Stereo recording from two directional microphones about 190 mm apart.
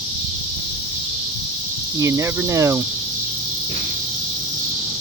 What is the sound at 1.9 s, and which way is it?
Speech, 15° right (ahead or behind).